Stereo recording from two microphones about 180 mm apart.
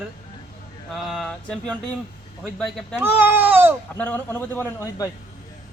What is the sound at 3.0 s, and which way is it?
Speech, 10° right (ahead or behind).